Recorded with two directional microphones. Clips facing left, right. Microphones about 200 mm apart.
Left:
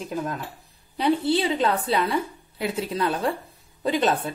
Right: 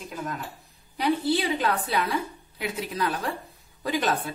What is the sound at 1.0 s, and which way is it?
A woman's voice, 25° left (ahead or behind).